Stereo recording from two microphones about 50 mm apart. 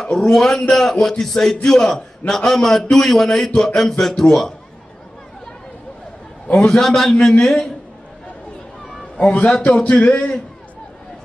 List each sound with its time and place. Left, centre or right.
0.0 s a man's voice: centre
6.5 s a man's voice: centre
9.1 s a man's voice: left